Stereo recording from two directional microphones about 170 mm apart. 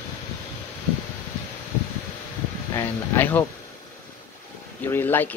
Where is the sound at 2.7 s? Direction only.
15° left (ahead or behind).